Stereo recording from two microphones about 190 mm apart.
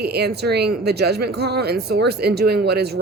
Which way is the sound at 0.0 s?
60° right (ahead or behind).